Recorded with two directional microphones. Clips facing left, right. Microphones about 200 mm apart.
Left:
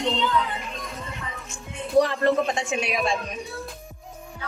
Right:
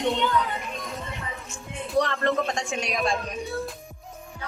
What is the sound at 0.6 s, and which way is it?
Music, centre (ahead or behind).